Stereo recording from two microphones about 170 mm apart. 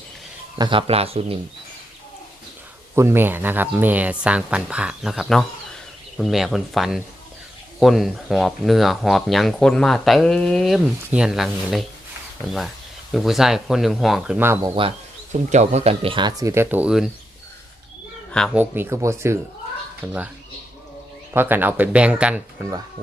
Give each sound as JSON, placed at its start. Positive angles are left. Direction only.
{"t": 0.6, "sound": "speech", "side_deg": -30}
{"t": 2.9, "sound": "speech", "side_deg": -15}
{"t": 14.8, "sound": "speech", "side_deg": -40}
{"t": 18.3, "sound": "speech", "side_deg": 5}
{"t": 18.5, "sound": "speech", "side_deg": -10}
{"t": 21.3, "sound": "speech", "side_deg": -10}